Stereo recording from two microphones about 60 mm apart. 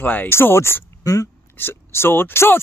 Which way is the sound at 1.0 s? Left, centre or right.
Left.